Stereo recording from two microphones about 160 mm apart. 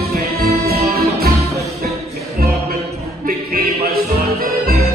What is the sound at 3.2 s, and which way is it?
Music, 65° right (ahead or behind).